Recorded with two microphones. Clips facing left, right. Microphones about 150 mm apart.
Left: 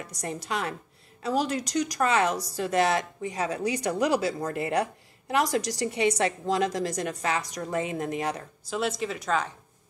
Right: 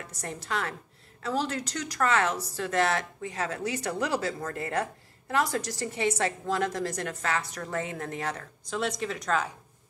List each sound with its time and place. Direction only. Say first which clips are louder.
0.0 s a woman's voice: left 4 dB; 15° left (ahead or behind)